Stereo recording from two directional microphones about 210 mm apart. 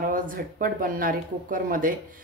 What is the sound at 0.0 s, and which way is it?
Speech, 40° right (ahead or behind).